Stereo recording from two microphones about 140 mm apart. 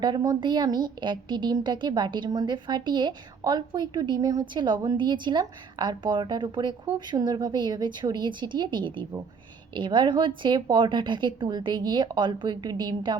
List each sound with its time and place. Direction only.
0.0 s a woman's voice: 30° right (ahead or behind)